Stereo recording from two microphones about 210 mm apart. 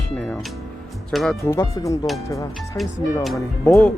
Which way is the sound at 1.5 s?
15° left (ahead or behind).